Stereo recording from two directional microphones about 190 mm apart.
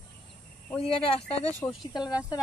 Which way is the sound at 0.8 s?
30° left (ahead or behind).